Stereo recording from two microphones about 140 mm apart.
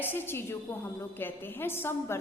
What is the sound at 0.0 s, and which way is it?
A woman's voice, 15° left (ahead or behind).